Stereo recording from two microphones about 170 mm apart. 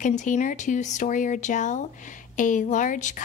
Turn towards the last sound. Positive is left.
turn(degrees=45)  # may be behind; listen again after turning